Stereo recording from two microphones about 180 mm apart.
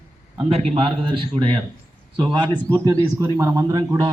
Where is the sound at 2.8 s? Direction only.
20° right (ahead or behind).